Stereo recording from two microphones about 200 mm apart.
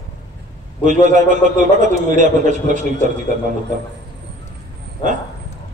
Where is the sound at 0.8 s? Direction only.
40° right (ahead or behind).